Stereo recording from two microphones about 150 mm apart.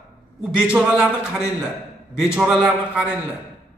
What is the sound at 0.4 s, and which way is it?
Speech, 5° right (ahead or behind).